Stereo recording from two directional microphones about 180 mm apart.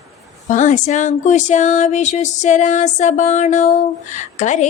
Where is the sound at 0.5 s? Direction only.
45° left (ahead or behind).